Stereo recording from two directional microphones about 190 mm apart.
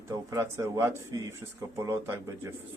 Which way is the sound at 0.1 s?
20° right (ahead or behind).